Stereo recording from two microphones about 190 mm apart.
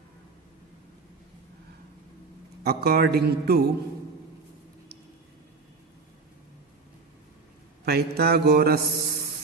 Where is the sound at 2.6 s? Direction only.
55° right (ahead or behind).